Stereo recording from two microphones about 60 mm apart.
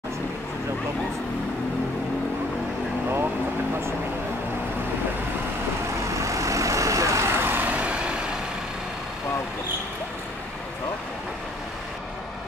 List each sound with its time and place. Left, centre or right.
6.1 s vehicle: right
7.2 s vehicle: right
7.7 s vehicle: centre